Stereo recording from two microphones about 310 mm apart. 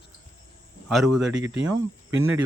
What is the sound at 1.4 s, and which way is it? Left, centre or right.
Speech, right.